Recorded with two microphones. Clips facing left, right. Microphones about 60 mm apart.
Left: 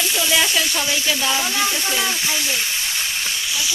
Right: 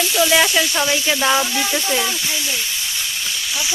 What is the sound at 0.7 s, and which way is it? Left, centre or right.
Speech, right.